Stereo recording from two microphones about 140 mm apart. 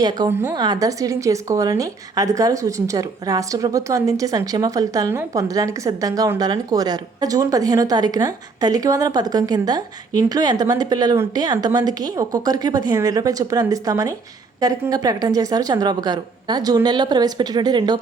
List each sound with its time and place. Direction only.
0.0 s a woman's voice: 30° right (ahead or behind)